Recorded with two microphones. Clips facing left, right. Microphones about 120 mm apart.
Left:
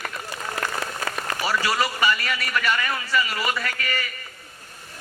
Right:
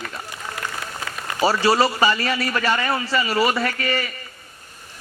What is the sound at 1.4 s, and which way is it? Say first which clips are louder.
A man's voice: right 7 dB; 30° right (ahead or behind).